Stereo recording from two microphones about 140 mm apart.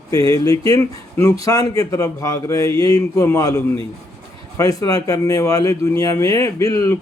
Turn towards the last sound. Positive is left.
turn(degrees=25)  # may be behind; listen again after turning